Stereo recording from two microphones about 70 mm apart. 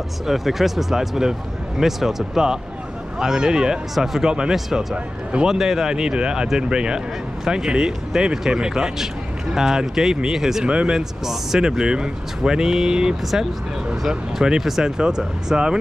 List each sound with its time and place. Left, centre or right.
0.3 s speech: centre